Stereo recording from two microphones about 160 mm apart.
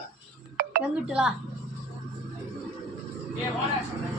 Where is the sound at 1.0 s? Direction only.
5° right (ahead or behind).